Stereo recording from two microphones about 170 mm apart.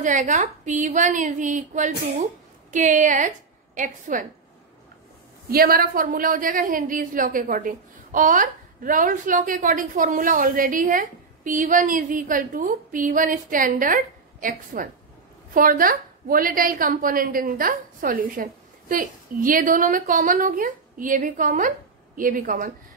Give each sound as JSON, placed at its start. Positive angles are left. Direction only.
{"t": 0.0, "sound": "a woman's voice", "side_deg": -45}
{"t": 5.5, "sound": "a woman's voice", "side_deg": -60}